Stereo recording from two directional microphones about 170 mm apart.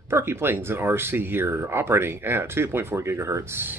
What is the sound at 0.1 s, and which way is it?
A man's voice, 15° right (ahead or behind).